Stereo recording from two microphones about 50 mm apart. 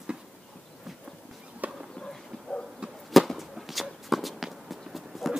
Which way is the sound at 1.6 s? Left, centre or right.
Right.